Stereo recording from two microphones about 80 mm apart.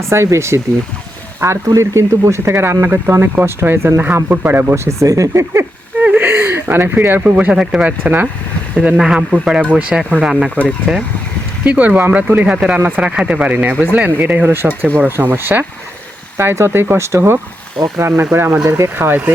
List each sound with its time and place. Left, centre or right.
0.0 s speech: right
4.7 s speech: right
6.0 s a sound: right
7.3 s speech: centre
10.9 s speech: centre
11.6 s speech: centre